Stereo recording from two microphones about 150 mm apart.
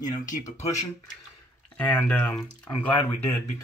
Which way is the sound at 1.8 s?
10° left (ahead or behind).